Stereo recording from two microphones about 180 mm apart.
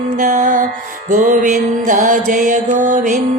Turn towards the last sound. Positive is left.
turn(degrees=-45)  # may be behind; listen again after turning